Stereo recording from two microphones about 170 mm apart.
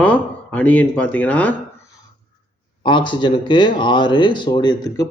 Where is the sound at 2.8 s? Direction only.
30° left (ahead or behind).